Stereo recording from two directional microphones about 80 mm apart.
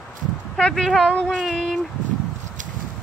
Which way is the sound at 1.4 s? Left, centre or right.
Centre.